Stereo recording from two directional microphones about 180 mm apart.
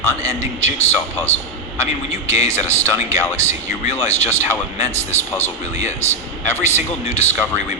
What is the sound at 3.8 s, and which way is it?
Speech, 35° left (ahead or behind).